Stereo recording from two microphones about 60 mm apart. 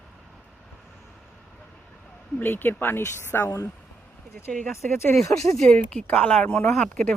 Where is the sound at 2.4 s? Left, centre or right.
Left.